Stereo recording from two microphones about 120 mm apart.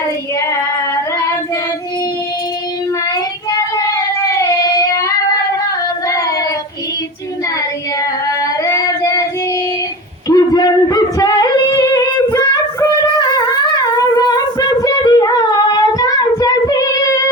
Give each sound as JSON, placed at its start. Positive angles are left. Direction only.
{"t": 3.8, "sound": "child singing", "side_deg": 30}
{"t": 8.6, "sound": "a sound", "side_deg": 25}
{"t": 10.2, "sound": "yodeling", "side_deg": 30}
{"t": 12.3, "sound": "female singing", "side_deg": 30}
{"t": 14.3, "sound": "singing", "side_deg": 35}